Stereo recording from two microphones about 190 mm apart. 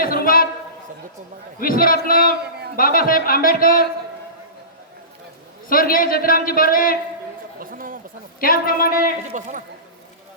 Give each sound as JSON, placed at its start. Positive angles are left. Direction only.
{"t": 0.0, "sound": "a sound", "side_deg": 50}
{"t": 1.5, "sound": "a man's voice", "side_deg": 50}
{"t": 5.6, "sound": "a man's voice", "side_deg": 50}
{"t": 7.6, "sound": "chatter", "side_deg": -45}
{"t": 8.4, "sound": "a man's voice", "side_deg": 50}
{"t": 9.3, "sound": "a man's voice", "side_deg": -40}